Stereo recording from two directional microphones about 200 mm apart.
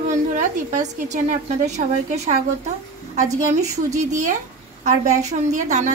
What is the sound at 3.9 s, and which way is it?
A woman's voice, 35° right (ahead or behind).